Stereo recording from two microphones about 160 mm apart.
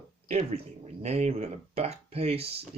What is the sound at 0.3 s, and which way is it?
Speech, 45° right (ahead or behind).